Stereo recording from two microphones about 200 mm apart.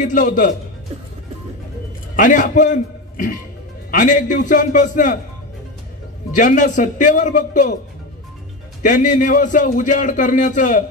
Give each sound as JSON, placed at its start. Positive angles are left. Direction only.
{"t": 0.0, "sound": "a man's voice", "side_deg": 40}
{"t": 2.1, "sound": "a man's voice", "side_deg": 40}
{"t": 6.3, "sound": "a man's voice", "side_deg": 40}
{"t": 8.8, "sound": "a man's voice", "side_deg": 40}